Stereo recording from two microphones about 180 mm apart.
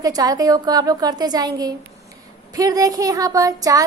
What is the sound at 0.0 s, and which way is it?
A woman's voice, 20° right (ahead or behind).